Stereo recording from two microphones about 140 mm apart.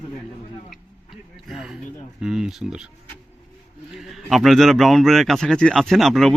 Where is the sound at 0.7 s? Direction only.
Centre (ahead or behind).